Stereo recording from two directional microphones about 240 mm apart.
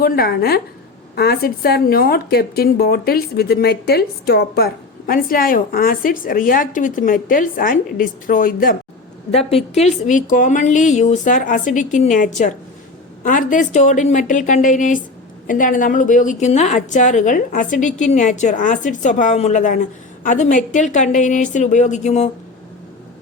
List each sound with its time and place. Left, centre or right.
0.0 s a woman's voice: left
9.5 s a woman's voice: left